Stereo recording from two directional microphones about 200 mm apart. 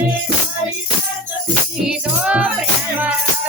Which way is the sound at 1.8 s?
5° right (ahead or behind).